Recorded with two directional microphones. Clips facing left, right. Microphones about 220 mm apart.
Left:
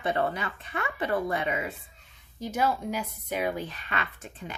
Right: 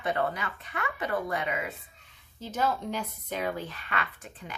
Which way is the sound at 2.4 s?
10° left (ahead or behind).